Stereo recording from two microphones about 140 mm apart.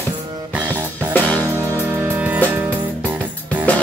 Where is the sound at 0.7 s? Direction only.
10° left (ahead or behind).